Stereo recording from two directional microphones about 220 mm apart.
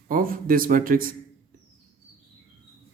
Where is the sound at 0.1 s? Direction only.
40° right (ahead or behind).